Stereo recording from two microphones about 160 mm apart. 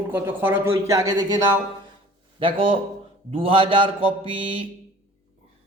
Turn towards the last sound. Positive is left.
turn(degrees=-35)  # may be behind; listen again after turning